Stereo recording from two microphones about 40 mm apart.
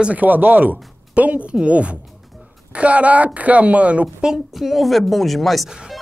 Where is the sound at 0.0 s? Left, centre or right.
Right.